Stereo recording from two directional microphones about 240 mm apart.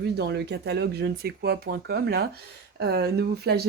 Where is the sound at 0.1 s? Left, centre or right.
Right.